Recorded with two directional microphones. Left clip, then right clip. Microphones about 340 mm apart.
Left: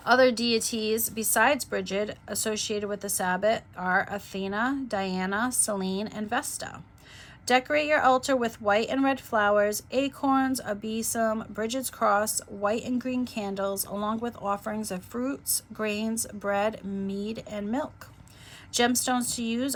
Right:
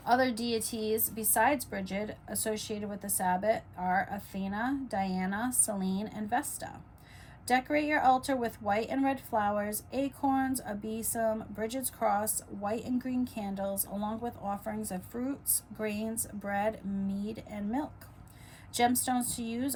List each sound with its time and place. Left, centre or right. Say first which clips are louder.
0.0 s a woman's voice: left 7 dB; centre